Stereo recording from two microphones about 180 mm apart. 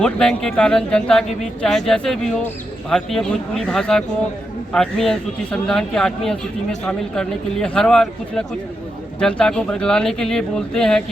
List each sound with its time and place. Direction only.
0.0 s speech: 5° left (ahead or behind)